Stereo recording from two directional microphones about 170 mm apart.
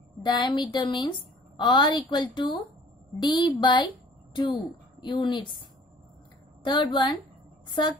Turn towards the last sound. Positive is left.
turn(degrees=25)  # may be behind; listen again after turning